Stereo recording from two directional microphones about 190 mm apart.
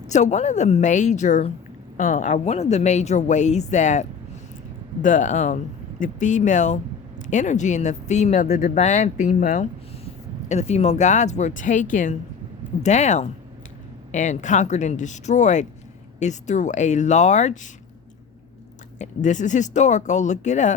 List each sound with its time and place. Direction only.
0.1 s a woman's voice: 40° left (ahead or behind)
5.0 s a woman's voice: 40° left (ahead or behind)
8.4 s speech: 50° left (ahead or behind)
8.7 s a woman's voice: 40° left (ahead or behind)
18.9 s a woman's voice: 40° left (ahead or behind)